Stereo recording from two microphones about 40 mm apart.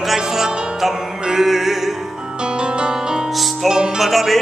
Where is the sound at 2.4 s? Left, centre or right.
Right.